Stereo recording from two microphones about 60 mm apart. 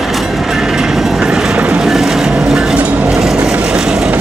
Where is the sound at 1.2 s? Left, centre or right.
Centre.